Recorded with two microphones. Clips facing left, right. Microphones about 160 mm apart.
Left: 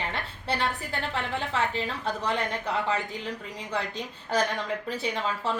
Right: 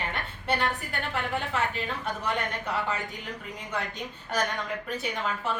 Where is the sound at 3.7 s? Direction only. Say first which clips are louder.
Left 2 dB; 30° left (ahead or behind).